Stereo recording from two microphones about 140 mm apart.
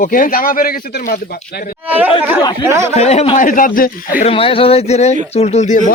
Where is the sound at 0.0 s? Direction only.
75° left (ahead or behind).